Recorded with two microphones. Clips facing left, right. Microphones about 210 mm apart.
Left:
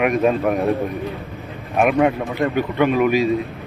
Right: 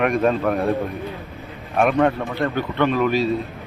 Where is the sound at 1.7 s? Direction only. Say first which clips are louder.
Left 1 dB; 10° left (ahead or behind).